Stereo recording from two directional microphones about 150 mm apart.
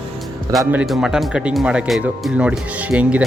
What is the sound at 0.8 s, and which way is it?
Speech, centre (ahead or behind).